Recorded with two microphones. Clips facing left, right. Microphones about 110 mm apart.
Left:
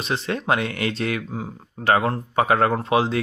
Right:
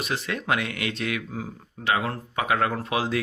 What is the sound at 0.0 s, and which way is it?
Speech, 30° left (ahead or behind).